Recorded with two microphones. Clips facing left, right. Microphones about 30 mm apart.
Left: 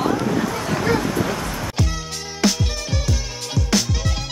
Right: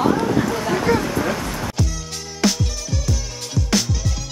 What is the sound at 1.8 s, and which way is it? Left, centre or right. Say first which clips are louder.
Music: left 1 dB; centre.